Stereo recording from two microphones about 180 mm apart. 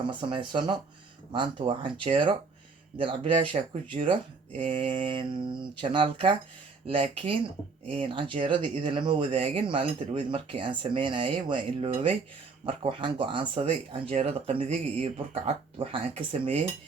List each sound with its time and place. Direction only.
0.1 s speech: 25° right (ahead or behind)